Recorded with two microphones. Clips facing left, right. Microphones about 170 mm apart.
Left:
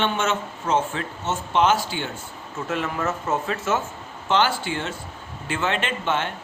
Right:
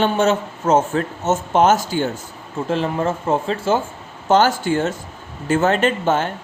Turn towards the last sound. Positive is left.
turn(degrees=-40)  # may be behind; listen again after turning